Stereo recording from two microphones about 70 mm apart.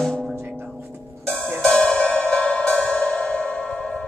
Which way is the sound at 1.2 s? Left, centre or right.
Centre.